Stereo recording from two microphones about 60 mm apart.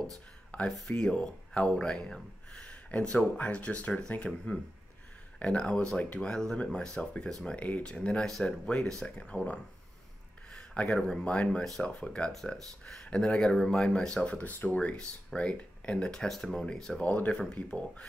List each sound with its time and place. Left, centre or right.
0.7 s speech: centre
1.0 s speech: centre
7.4 s speech: left
10.7 s speech: centre
11.0 s speech: centre
11.2 s speech: left
17.0 s speech: left
17.3 s speech: centre